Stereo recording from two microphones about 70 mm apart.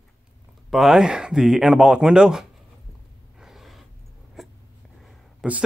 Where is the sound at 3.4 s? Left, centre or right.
Centre.